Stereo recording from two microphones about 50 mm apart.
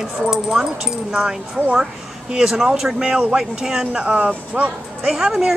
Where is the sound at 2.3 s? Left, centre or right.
Centre; by 4.7 s right.